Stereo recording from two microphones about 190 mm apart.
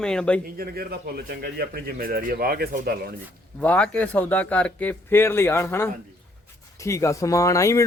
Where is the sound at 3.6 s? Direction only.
5° left (ahead or behind).